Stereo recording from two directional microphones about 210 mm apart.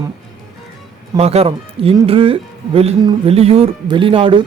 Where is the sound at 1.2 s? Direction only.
30° right (ahead or behind).